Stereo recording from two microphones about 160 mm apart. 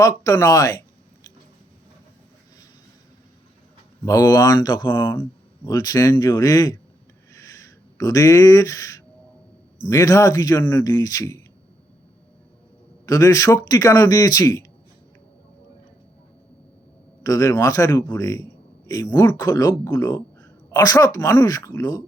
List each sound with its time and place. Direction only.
0.0 s speech: 20° left (ahead or behind)
4.0 s speech: 20° left (ahead or behind)
7.3 s a sound: 20° left (ahead or behind)
9.8 s speech: 20° left (ahead or behind)
13.1 s speech: 20° left (ahead or behind)
17.2 s speech: 20° left (ahead or behind)